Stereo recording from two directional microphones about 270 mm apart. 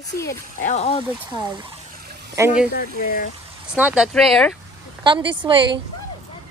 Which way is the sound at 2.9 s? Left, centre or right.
Left.